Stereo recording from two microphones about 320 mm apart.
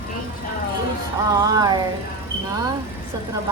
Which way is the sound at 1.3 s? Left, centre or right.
Centre.